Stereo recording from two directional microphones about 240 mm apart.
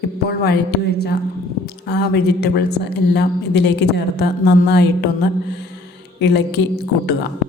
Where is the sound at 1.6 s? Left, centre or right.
Left.